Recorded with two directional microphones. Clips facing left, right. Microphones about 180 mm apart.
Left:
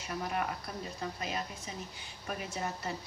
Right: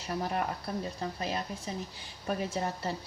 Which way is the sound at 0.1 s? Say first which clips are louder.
Right 3 dB; 35° right (ahead or behind).